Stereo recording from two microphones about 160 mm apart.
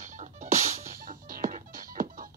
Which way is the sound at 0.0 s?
50° right (ahead or behind).